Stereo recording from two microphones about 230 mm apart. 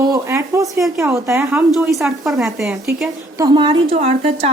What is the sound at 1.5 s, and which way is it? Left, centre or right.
A woman's voice, centre.